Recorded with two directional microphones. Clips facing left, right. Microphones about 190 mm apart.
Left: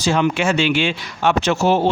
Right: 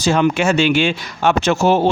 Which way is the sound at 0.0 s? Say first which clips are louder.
Right 2 dB; 45° right (ahead or behind).